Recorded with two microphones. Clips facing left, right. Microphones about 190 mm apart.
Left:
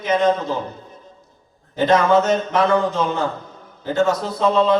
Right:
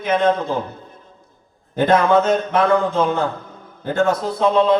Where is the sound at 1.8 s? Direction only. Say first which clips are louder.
Right 1 dB; 55° right (ahead or behind).